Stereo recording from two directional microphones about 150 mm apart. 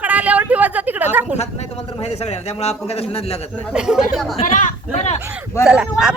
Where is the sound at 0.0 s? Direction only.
10° right (ahead or behind).